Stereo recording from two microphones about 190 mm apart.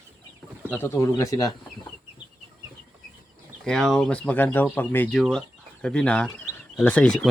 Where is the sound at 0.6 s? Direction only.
10° left (ahead or behind).